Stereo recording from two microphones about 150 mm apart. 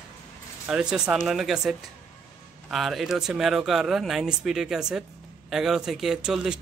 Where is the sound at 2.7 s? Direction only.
Centre (ahead or behind).